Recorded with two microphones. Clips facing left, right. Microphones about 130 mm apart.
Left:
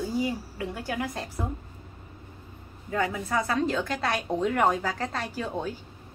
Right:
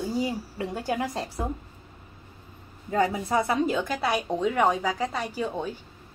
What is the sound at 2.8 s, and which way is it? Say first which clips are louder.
Speech: right 4 dB; 30° right (ahead or behind).